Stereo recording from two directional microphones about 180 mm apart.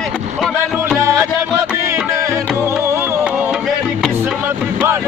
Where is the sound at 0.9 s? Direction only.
15° right (ahead or behind).